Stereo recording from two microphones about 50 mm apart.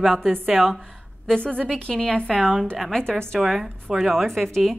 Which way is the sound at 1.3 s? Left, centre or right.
Centre.